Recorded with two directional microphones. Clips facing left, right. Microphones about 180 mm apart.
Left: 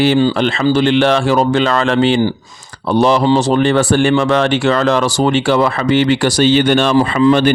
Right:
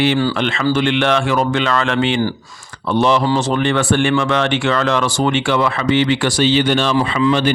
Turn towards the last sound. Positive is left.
turn(degrees=35)  # may be behind; listen again after turning